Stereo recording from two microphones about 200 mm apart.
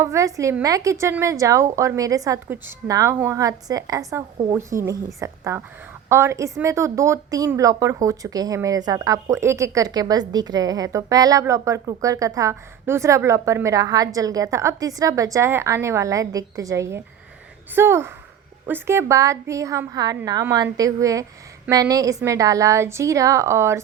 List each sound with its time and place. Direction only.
0.0 s speech: 15° right (ahead or behind)